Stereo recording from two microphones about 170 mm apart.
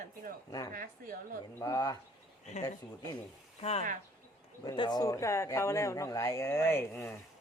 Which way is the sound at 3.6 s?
40° left (ahead or behind).